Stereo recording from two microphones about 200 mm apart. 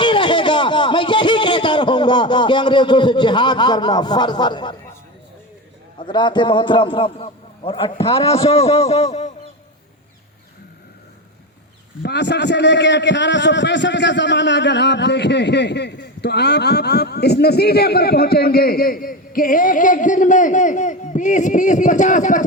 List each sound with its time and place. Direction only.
0.0 s speech: 25° left (ahead or behind)
6.0 s a man's voice: 25° left (ahead or behind)
12.0 s a man's voice: 60° left (ahead or behind); by 22.4 s 40° left (ahead or behind)